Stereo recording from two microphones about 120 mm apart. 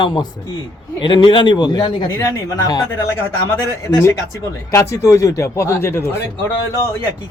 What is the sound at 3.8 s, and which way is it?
Speech, 20° left (ahead or behind).